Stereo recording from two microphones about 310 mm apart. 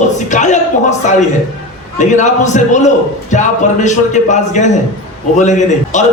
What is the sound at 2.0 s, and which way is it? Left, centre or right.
A man's voice, left.